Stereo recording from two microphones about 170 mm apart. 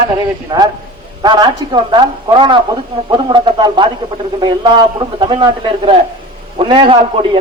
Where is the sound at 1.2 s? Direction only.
25° right (ahead or behind).